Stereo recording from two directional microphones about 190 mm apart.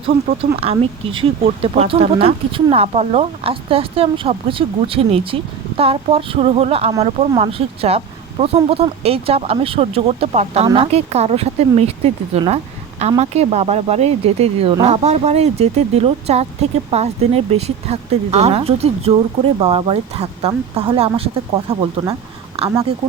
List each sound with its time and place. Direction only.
0.5 s speech: 30° right (ahead or behind)